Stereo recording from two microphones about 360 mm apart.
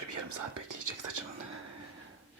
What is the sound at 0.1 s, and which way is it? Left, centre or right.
Whispering, right.